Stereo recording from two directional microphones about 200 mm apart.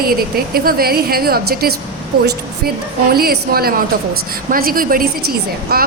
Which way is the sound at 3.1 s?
50° right (ahead or behind).